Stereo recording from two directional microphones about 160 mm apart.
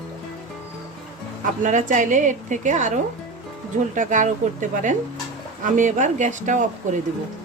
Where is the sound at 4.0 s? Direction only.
50° right (ahead or behind).